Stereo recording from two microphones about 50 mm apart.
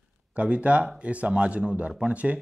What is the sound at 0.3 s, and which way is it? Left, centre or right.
Speech, right.